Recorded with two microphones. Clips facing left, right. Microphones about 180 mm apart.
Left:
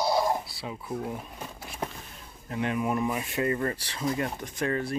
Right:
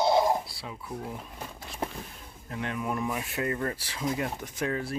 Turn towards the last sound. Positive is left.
turn(degrees=-5)  # may be behind; listen again after turning